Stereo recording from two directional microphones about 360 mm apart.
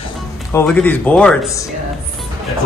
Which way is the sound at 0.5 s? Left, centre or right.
Centre.